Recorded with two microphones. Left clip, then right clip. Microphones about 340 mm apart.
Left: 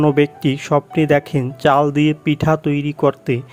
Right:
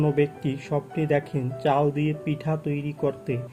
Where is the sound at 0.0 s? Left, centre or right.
Left.